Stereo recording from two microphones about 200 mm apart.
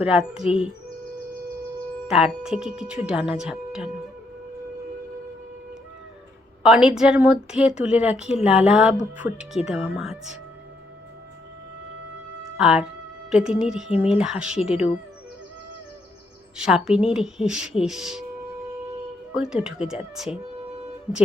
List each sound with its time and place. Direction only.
0.0 s speech: 5° right (ahead or behind)
2.0 s speech: 5° right (ahead or behind)
6.6 s speech: 5° right (ahead or behind)
12.5 s speech: 5° right (ahead or behind)
16.6 s speech: 5° right (ahead or behind)
19.3 s speech: 5° right (ahead or behind)